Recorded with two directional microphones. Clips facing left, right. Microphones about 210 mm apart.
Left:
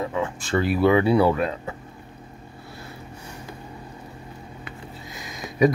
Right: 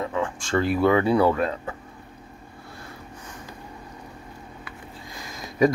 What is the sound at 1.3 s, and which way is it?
Speech, 25° left (ahead or behind).